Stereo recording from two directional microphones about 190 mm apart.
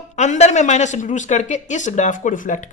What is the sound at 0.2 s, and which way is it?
A woman's voice, 35° left (ahead or behind).